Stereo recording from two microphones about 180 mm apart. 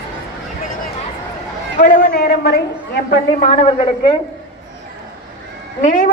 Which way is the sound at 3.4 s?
35° left (ahead or behind).